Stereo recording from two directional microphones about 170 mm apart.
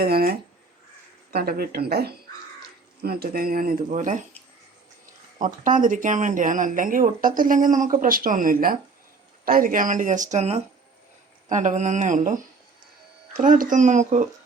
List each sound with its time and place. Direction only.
0.0 s speech: 65° right (ahead or behind)
3.8 s speech: 45° right (ahead or behind)
5.4 s speech: 50° right (ahead or behind)
13.3 s speech: 50° right (ahead or behind)